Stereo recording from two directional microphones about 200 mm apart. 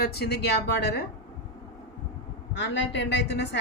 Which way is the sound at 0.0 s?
50° left (ahead or behind).